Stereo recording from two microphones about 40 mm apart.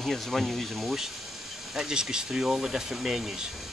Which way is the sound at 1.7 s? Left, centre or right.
Centre.